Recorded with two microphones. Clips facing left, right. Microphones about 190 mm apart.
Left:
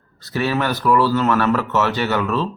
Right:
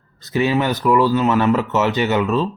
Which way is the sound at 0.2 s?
20° right (ahead or behind).